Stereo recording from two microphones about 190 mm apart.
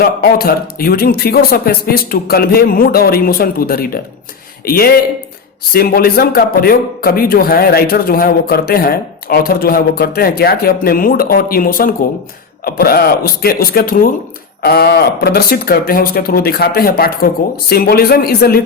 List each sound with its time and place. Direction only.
0.0 s speech: 50° left (ahead or behind)